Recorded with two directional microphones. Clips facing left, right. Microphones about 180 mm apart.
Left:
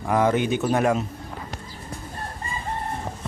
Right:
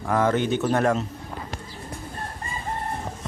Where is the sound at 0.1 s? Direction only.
15° left (ahead or behind).